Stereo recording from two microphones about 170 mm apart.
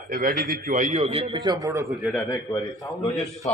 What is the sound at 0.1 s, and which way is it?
Speech, 55° right (ahead or behind).